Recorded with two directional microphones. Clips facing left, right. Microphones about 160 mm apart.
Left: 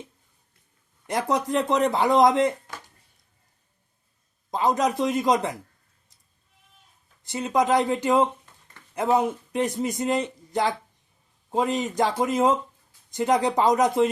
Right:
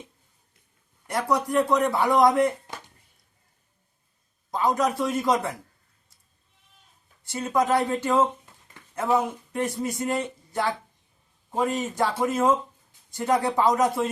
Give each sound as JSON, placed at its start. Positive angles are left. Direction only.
{"t": 1.0, "sound": "a man's voice", "side_deg": 20}
{"t": 4.5, "sound": "a man's voice", "side_deg": 20}
{"t": 7.3, "sound": "a man's voice", "side_deg": 20}